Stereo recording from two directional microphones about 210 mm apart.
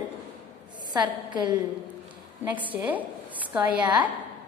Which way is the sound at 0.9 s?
20° right (ahead or behind).